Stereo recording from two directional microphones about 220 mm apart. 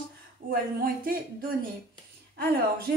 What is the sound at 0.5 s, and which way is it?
Speech, 40° right (ahead or behind).